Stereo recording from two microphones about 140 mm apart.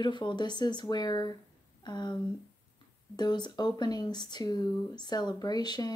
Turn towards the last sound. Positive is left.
turn(degrees=30)  # may be behind; listen again after turning